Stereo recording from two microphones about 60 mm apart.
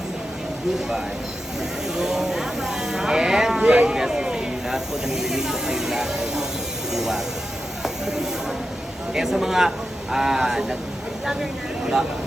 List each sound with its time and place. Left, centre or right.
2.0 s speech: centre
7.8 s a sound: centre
9.1 s speech: centre